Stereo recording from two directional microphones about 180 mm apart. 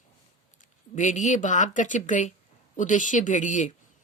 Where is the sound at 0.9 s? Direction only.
40° left (ahead or behind).